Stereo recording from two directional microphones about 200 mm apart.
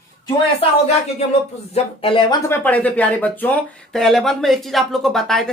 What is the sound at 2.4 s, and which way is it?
Speech, 10° left (ahead or behind).